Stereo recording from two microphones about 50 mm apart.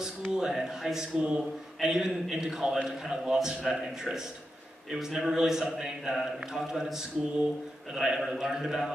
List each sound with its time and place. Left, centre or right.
0.3 s a man's voice: centre
1.2 s a man's voice: centre
1.9 s a man's voice: centre